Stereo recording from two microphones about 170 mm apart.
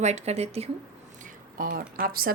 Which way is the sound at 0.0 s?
40° right (ahead or behind).